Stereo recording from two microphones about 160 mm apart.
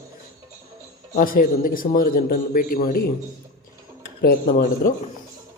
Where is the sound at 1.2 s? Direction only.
60° left (ahead or behind).